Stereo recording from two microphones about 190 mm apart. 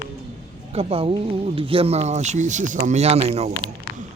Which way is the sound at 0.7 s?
30° right (ahead or behind).